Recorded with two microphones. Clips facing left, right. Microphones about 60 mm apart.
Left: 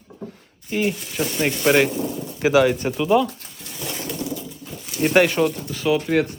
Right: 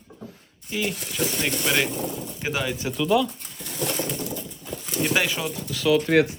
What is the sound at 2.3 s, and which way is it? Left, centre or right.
Speech, left.